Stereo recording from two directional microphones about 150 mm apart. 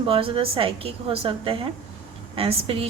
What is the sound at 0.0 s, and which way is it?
Speech, 35° right (ahead or behind).